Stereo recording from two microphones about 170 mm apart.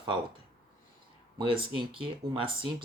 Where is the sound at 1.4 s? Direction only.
30° right (ahead or behind).